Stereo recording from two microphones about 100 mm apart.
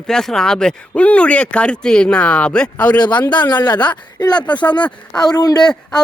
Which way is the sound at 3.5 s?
45° left (ahead or behind).